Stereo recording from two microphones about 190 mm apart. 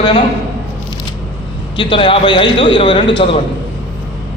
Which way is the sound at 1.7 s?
25° left (ahead or behind).